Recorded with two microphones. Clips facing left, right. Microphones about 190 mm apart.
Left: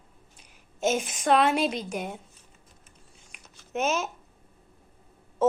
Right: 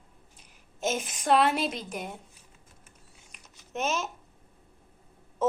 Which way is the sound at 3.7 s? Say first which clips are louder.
Left 3 dB; 5° left (ahead or behind).